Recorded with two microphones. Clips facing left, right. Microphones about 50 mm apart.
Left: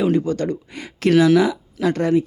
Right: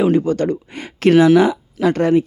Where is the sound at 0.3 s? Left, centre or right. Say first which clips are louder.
Right 4 dB; right.